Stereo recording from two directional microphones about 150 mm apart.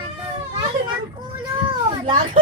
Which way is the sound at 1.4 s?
35° right (ahead or behind).